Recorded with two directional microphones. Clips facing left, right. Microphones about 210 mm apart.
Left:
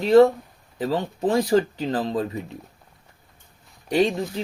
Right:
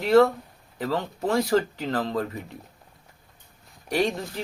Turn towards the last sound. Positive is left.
turn(degrees=20)  # may be behind; listen again after turning